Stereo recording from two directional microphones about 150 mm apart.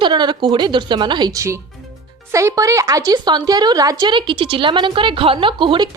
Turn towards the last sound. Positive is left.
turn(degrees=-30)  # may be behind; listen again after turning